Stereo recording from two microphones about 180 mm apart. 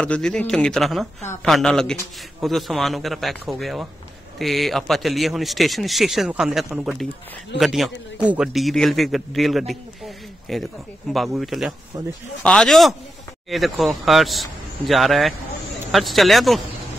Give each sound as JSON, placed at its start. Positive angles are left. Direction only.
{"t": 0.0, "sound": "a man's voice", "side_deg": 5}
{"t": 11.9, "sound": "speech", "side_deg": -15}
{"t": 12.4, "sound": "a man's voice", "side_deg": 5}